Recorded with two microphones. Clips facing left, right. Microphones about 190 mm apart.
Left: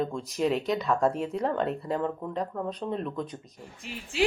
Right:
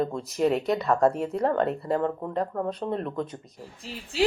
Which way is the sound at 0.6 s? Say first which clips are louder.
Right 3 dB; 55° right (ahead or behind).